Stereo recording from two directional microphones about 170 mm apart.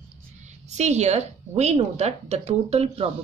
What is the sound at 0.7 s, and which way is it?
Speech, 40° right (ahead or behind).